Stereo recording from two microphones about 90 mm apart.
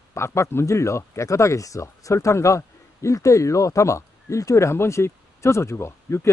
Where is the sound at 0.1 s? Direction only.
30° left (ahead or behind).